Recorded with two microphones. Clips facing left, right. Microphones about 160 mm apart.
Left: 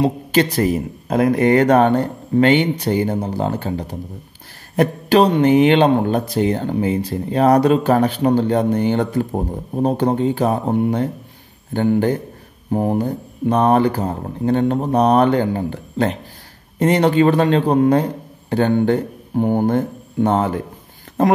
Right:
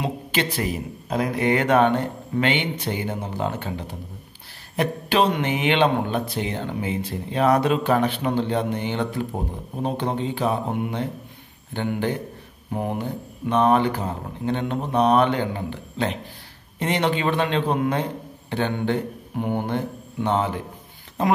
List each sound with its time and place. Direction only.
0.0 s a man's voice: 40° left (ahead or behind)